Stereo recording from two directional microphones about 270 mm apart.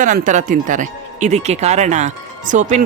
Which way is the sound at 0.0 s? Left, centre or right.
Right.